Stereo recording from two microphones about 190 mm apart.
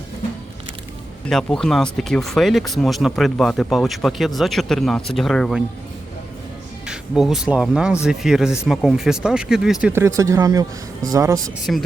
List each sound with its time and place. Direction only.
1.3 s speech: centre (ahead or behind)
6.8 s speech: 5° right (ahead or behind)
9.9 s speech: 15° right (ahead or behind)
11.7 s speech: 5° left (ahead or behind)